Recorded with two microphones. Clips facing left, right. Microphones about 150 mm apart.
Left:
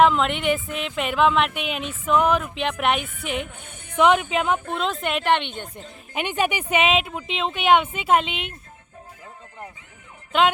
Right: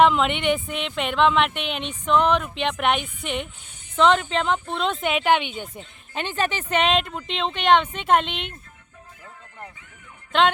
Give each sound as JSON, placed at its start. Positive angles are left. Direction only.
{"t": 0.0, "sound": "speech", "side_deg": 0}
{"t": 3.4, "sound": "a woman's voice", "side_deg": 55}
{"t": 3.9, "sound": "speech", "side_deg": 10}
{"t": 6.1, "sound": "speech", "side_deg": 15}